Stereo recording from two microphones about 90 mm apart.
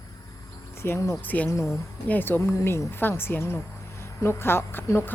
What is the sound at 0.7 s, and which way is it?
Speech, 30° left (ahead or behind).